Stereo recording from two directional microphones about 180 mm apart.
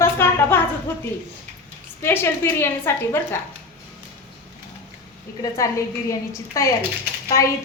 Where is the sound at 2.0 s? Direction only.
15° left (ahead or behind).